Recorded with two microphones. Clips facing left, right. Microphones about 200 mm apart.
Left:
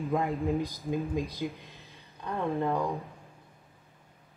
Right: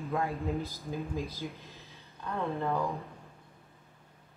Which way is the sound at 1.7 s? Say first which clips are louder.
Even; centre (ahead or behind).